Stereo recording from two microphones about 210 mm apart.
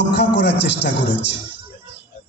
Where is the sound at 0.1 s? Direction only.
55° left (ahead or behind).